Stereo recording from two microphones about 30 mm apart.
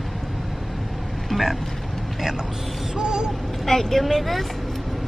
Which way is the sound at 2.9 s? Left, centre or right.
Right.